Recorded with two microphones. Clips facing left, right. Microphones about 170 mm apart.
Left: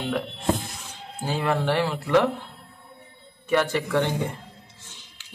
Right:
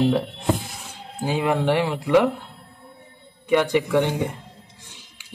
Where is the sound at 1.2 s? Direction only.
15° right (ahead or behind).